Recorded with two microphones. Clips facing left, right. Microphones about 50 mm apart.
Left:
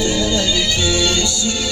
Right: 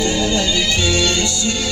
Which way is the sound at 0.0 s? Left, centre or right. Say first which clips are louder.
Even; right.